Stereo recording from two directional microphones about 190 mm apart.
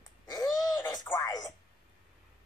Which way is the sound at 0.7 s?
10° left (ahead or behind).